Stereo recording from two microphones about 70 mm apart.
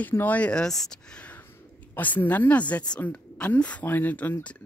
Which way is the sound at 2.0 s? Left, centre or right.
Left.